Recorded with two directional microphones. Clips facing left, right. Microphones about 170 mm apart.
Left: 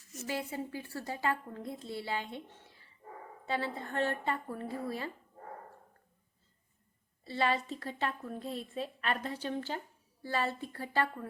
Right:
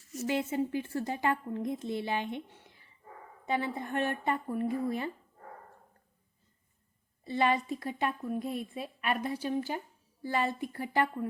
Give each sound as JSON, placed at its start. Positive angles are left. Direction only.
{"t": 0.3, "sound": "a woman's voice", "side_deg": -20}
{"t": 2.5, "sound": "a sound", "side_deg": -20}
{"t": 3.4, "sound": "a woman's voice", "side_deg": -15}
{"t": 7.3, "sound": "a woman's voice", "side_deg": -15}